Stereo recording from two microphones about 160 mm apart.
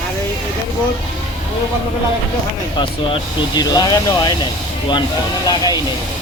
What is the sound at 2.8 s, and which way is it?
Speech, 30° left (ahead or behind).